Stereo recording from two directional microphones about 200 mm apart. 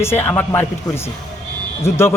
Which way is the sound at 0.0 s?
10° left (ahead or behind).